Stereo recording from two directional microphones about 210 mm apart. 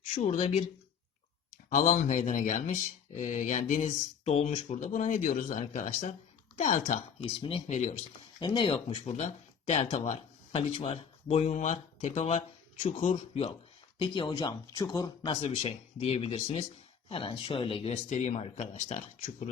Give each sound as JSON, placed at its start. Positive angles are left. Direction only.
{"t": 0.2, "sound": "speech", "side_deg": 30}
{"t": 1.7, "sound": "speech", "side_deg": 35}
{"t": 15.4, "sound": "speech", "side_deg": 30}